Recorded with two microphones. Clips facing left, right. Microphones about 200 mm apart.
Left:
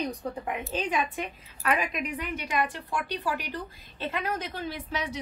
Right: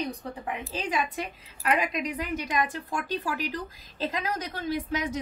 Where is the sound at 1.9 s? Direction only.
40° right (ahead or behind).